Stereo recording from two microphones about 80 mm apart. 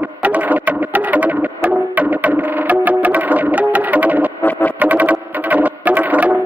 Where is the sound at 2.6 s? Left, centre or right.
Centre.